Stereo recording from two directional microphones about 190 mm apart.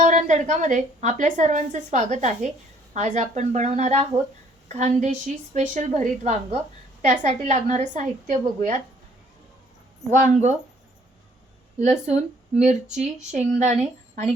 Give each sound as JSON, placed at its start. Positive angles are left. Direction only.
{"t": 0.0, "sound": "a woman's voice", "side_deg": -40}
{"t": 10.2, "sound": "a woman's voice", "side_deg": -40}
{"t": 11.8, "sound": "a woman's voice", "side_deg": -35}